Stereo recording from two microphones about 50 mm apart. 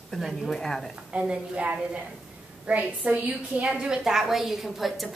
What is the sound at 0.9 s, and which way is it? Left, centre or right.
A woman's voice, right.